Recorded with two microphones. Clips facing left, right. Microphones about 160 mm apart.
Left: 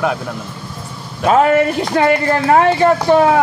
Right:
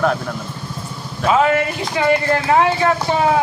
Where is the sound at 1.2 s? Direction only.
50° left (ahead or behind).